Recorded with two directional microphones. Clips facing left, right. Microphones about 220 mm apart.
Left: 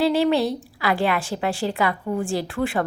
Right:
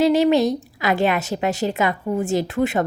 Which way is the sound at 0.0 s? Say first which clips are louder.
Right 3 dB; 20° right (ahead or behind).